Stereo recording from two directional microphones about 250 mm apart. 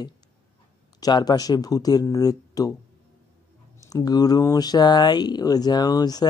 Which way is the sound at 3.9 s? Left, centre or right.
Centre.